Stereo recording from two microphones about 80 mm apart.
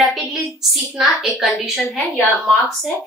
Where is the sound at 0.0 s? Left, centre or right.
Centre.